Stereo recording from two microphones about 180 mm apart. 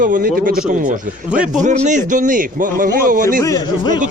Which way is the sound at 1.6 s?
40° right (ahead or behind).